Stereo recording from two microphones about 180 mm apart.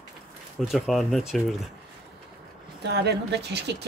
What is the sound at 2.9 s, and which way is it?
Speech, 65° right (ahead or behind).